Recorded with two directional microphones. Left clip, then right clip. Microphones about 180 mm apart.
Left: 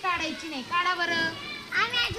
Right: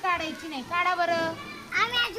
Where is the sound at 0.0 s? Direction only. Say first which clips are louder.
Right 1 dB; 10° right (ahead or behind).